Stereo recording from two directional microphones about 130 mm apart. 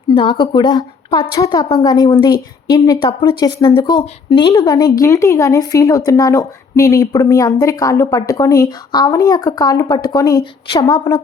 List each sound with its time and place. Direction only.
0.1 s a woman's voice: 40° left (ahead or behind)